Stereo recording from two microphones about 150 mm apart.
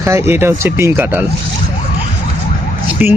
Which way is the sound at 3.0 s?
10° right (ahead or behind).